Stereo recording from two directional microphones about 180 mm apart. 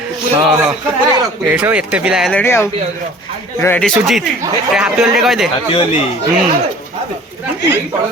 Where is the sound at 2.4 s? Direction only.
15° left (ahead or behind).